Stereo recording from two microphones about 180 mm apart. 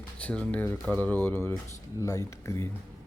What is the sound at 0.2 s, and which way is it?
Speech, 5° left (ahead or behind).